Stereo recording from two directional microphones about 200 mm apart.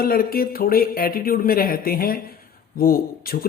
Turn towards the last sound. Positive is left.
turn(degrees=45)  # may be behind; listen again after turning